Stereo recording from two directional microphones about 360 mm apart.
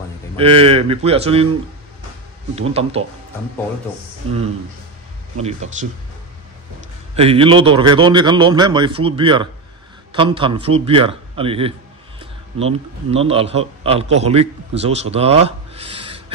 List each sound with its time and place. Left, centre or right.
0.4 s speech: centre
2.5 s speech: centre
5.4 s speech: centre
7.2 s a man's voice: centre